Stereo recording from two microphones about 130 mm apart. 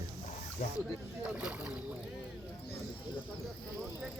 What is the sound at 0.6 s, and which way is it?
Speech, 90° left.